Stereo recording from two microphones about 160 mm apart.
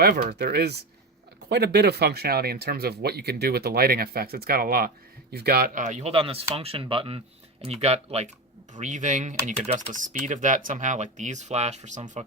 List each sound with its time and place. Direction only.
0.0 s speech: 75° right (ahead or behind); by 12.2 s 50° right (ahead or behind)